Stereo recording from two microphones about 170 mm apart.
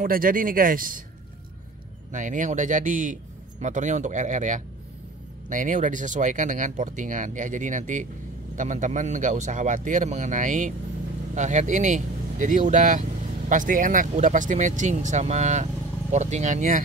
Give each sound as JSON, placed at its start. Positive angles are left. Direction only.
{"t": 0.0, "sound": "speech", "side_deg": -55}
{"t": 2.1, "sound": "speech", "side_deg": -50}